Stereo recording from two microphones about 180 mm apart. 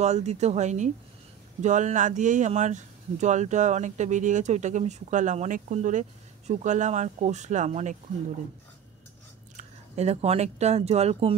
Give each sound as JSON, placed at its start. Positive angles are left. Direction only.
{"t": 0.0, "sound": "speech", "side_deg": -40}
{"t": 9.6, "sound": "speech", "side_deg": -35}